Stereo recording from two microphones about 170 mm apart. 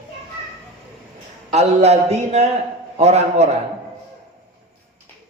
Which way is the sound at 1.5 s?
40° right (ahead or behind).